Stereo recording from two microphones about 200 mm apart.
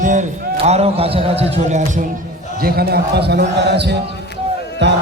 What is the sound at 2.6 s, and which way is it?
Speech, 50° right (ahead or behind).